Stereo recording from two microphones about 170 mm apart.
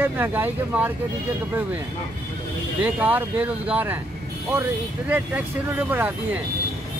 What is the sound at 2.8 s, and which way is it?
Speech, 10° right (ahead or behind).